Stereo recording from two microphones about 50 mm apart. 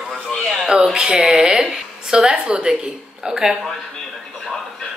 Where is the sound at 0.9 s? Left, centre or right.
Centre.